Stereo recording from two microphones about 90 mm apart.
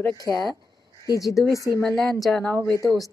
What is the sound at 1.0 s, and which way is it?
Speech, 40° left (ahead or behind).